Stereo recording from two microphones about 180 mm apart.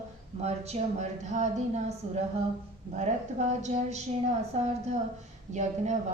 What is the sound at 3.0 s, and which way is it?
A woman's voice, 40° right (ahead or behind).